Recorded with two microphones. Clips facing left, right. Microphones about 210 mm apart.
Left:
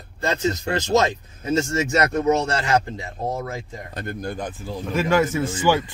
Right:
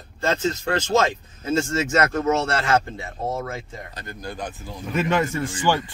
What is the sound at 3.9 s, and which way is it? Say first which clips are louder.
Speech: left 8 dB; 55° left (ahead or behind).